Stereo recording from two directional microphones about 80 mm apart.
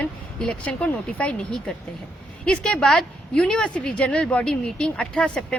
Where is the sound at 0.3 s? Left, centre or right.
Centre.